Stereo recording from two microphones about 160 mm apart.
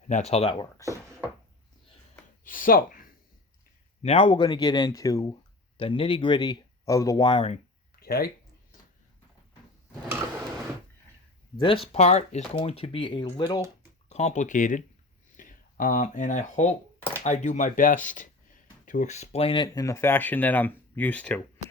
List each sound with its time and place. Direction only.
0.1 s speech: 40° left (ahead or behind)
0.5 s speech: 20° left (ahead or behind)
2.4 s speech: 60° left (ahead or behind)
4.0 s speech: 35° left (ahead or behind); by 5.4 s 20° left (ahead or behind)
5.7 s speech: 35° left (ahead or behind)
7.9 s a sound: 70° left (ahead or behind)
11.5 s speech: 30° left (ahead or behind)
11.9 s speech: 45° left (ahead or behind)
14.1 s speech: 45° left (ahead or behind); by 21.4 s 10° left (ahead or behind)